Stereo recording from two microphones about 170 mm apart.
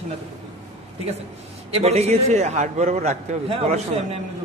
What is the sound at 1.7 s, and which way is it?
A man's voice, 40° right (ahead or behind).